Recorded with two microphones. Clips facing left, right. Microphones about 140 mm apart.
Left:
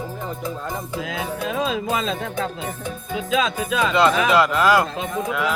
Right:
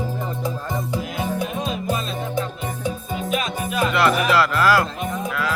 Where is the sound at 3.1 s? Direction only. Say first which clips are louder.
Left 5 dB; 90° left.